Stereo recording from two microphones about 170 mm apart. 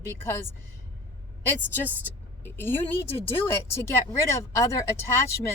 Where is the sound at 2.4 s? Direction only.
15° left (ahead or behind).